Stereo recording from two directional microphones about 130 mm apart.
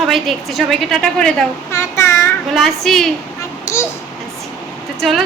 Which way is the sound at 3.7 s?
20° left (ahead or behind).